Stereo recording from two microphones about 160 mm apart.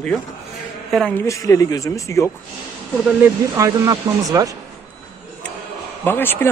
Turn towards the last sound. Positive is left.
turn(degrees=15)  # may be behind; listen again after turning